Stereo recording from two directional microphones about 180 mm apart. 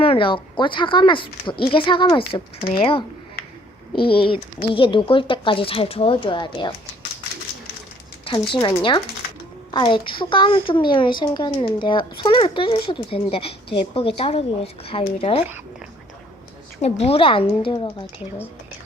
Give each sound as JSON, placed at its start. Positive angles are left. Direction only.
{"t": 0.0, "sound": "speech", "side_deg": 30}
{"t": 4.1, "sound": "speech", "side_deg": 30}
{"t": 8.5, "sound": "speech", "side_deg": 25}
{"t": 16.8, "sound": "speech", "side_deg": 35}